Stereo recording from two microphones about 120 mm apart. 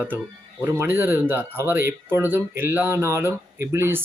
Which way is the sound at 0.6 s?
15° right (ahead or behind).